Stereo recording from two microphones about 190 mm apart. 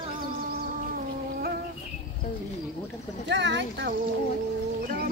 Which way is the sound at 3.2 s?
65° right (ahead or behind).